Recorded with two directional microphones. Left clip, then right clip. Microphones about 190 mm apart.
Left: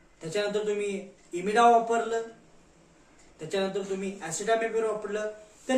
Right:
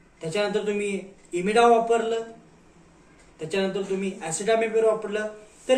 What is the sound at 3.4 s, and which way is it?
Speech, 15° left (ahead or behind).